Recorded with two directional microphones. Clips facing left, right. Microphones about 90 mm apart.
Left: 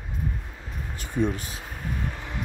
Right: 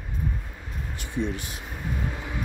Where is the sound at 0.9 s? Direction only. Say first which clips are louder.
Left 3 dB; 45° left (ahead or behind).